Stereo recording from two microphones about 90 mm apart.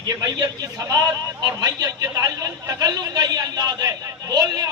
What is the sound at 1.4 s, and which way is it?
A man's voice, 45° right (ahead or behind).